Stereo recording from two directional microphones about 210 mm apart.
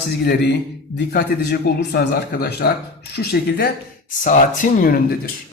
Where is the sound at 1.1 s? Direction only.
50° left (ahead or behind).